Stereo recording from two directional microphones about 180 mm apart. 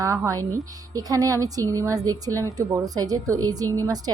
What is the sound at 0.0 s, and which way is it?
A woman's voice, 15° right (ahead or behind).